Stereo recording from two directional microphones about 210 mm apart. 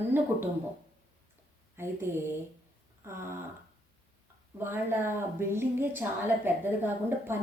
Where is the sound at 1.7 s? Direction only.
10° right (ahead or behind).